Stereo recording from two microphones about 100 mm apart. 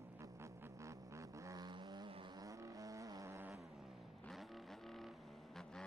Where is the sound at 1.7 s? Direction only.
50° right (ahead or behind).